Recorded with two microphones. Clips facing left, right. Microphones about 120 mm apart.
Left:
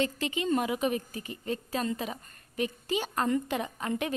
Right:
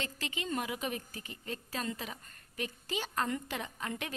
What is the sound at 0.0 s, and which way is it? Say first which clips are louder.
A woman's voice: left 10 dB; 20° left (ahead or behind).